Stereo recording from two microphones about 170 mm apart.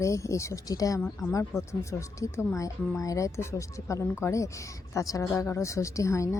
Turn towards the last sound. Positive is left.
turn(degrees=20)  # may be behind; listen again after turning